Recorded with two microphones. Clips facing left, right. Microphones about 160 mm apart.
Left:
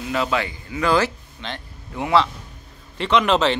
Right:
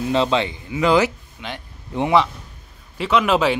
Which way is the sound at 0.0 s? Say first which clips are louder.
Right 4 dB; 25° right (ahead or behind).